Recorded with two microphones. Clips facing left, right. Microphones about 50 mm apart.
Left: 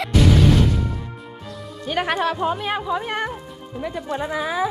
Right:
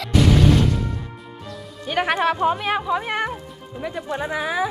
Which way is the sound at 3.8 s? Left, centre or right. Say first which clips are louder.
Left 1 dB; centre.